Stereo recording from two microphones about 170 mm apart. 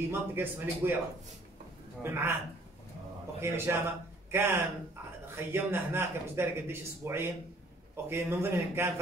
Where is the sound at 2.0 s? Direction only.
15° right (ahead or behind).